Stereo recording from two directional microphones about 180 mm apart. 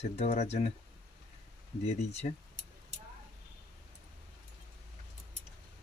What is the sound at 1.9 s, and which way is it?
Speech, 35° left (ahead or behind).